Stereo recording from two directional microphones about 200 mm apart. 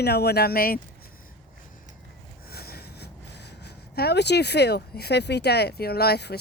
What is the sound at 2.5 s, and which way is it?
Speech, 50° left (ahead or behind).